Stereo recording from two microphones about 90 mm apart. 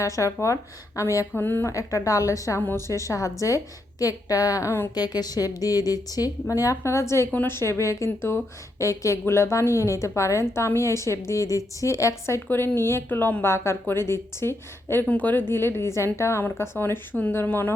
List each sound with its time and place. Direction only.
0.0 s a woman's voice: 35° left (ahead or behind)
1.3 s speech: 20° left (ahead or behind)
1.7 s a woman's voice: 35° left (ahead or behind)
2.6 s speech: 20° left (ahead or behind)
2.8 s a woman's voice: 35° left (ahead or behind)
15.0 s speech: 15° left (ahead or behind)